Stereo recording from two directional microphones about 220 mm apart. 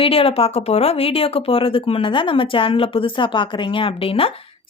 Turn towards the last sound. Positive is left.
turn(degrees=25)  # may be behind; listen again after turning